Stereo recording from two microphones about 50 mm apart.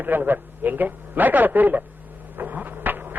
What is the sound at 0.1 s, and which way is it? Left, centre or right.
A man's voice, right.